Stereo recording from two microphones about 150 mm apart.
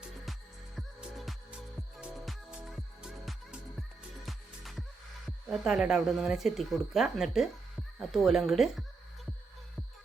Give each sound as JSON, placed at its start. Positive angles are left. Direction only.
{"t": 0.8, "sound": "music", "side_deg": 0}
{"t": 5.5, "sound": "speech", "side_deg": -5}